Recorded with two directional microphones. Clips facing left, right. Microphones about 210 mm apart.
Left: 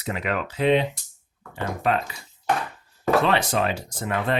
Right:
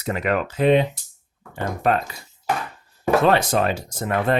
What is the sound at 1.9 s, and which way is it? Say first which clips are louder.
Speech: right 3 dB; 45° right (ahead or behind).